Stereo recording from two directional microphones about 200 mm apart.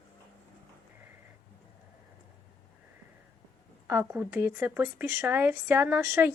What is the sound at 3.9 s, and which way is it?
Speech, 10° right (ahead or behind).